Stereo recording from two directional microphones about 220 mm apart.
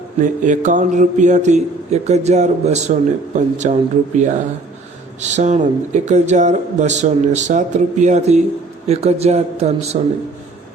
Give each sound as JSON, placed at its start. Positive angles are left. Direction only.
{"t": 0.2, "sound": "speech", "side_deg": -35}